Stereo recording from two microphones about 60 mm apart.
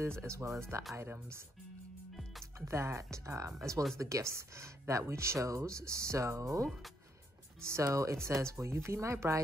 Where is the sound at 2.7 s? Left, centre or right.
Right.